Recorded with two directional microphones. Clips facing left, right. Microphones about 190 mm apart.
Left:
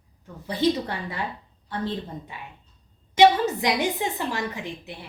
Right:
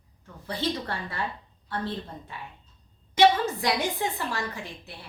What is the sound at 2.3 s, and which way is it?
A woman's voice, 15° left (ahead or behind).